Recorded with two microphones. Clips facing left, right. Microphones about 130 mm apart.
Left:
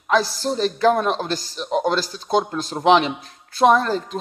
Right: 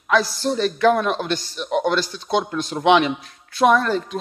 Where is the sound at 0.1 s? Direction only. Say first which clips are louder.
Even; 35° left (ahead or behind).